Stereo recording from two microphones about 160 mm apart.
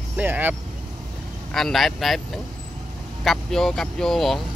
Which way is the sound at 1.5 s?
Centre (ahead or behind).